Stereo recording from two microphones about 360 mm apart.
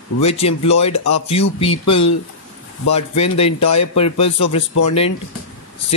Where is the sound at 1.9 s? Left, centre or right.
Left.